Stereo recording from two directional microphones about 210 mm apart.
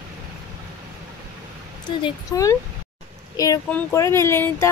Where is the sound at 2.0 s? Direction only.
15° left (ahead or behind).